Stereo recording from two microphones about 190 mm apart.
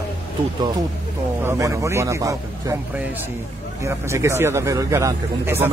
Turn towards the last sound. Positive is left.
turn(degrees=-10)  # may be behind; listen again after turning